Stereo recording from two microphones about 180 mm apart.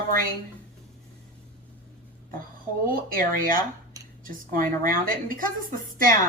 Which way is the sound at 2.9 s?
50° right (ahead or behind).